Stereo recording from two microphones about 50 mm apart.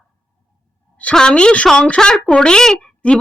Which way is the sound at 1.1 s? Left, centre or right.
Centre.